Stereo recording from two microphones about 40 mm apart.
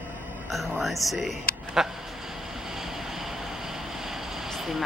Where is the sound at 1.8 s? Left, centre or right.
Centre.